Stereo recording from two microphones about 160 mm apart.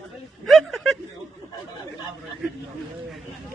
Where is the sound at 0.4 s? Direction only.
Centre (ahead or behind).